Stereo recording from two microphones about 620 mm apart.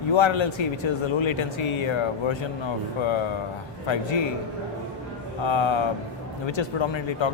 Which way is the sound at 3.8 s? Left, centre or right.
Left.